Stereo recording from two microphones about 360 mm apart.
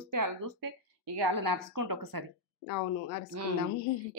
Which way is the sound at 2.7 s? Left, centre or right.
Left.